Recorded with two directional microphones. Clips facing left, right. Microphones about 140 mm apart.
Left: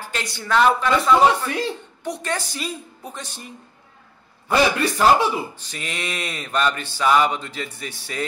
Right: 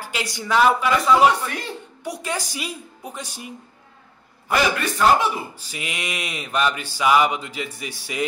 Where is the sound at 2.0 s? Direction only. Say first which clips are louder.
Left 1 dB; 10° right (ahead or behind).